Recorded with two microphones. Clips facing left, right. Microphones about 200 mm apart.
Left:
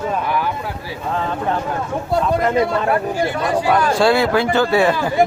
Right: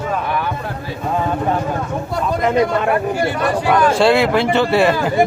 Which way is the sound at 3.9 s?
Centre (ahead or behind).